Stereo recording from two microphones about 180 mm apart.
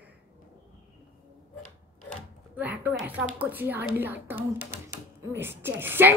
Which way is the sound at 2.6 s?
10° right (ahead or behind).